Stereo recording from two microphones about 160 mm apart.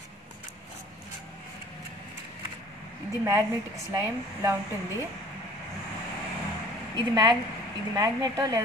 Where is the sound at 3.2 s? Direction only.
15° right (ahead or behind).